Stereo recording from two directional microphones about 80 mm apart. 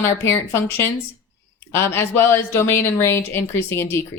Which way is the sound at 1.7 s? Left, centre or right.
Left.